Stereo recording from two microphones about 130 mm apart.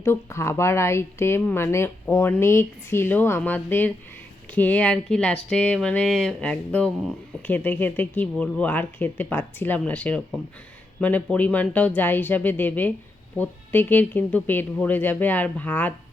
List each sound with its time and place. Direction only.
0.0 s speech: 20° left (ahead or behind)